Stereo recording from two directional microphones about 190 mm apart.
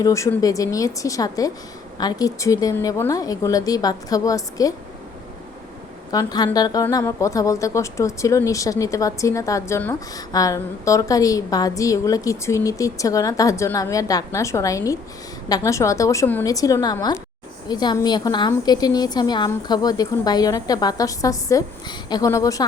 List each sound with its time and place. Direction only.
0.0 s a woman's voice: 15° left (ahead or behind)
6.1 s a woman's voice: 20° left (ahead or behind)